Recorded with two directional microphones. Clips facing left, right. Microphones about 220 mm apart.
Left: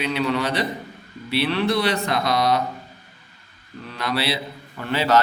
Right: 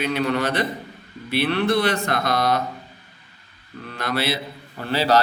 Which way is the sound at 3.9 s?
50° right (ahead or behind).